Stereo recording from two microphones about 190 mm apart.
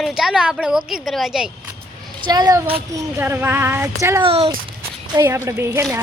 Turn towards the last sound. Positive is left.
turn(degrees=-15)  # may be behind; listen again after turning